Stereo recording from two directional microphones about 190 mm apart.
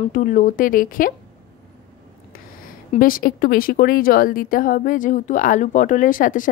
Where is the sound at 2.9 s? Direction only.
45° left (ahead or behind).